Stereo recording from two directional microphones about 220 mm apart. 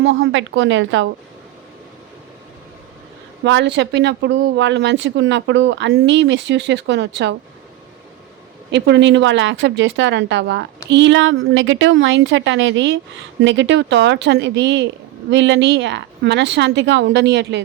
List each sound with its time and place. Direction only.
0.0 s a woman's voice: 55° right (ahead or behind)
3.4 s speech: 55° right (ahead or behind)
8.7 s a woman's voice: 55° right (ahead or behind)